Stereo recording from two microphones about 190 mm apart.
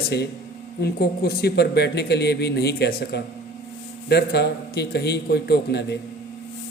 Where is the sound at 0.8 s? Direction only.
55° left (ahead or behind).